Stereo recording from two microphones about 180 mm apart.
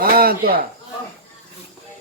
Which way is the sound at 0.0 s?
55° right (ahead or behind).